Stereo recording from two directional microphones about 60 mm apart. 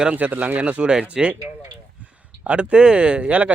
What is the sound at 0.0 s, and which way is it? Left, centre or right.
Speech, right.